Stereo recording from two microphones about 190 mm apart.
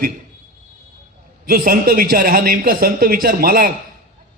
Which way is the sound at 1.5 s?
50° right (ahead or behind).